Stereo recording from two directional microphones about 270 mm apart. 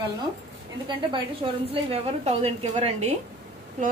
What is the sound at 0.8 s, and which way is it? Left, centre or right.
A woman's voice, centre.